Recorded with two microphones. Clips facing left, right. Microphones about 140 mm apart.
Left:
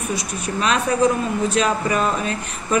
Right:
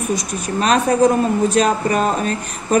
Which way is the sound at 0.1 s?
45° right (ahead or behind).